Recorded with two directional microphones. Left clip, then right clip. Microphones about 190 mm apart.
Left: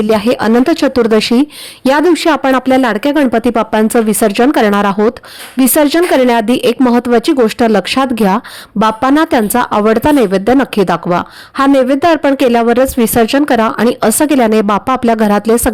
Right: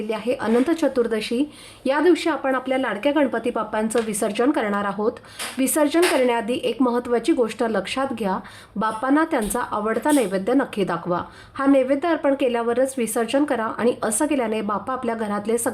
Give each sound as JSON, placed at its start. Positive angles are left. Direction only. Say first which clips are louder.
{"t": 0.1, "sound": "speech", "louder": "left 10 dB", "side_deg": 45}